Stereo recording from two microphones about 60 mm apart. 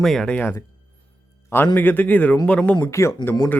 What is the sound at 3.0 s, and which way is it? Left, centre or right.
Speech, left.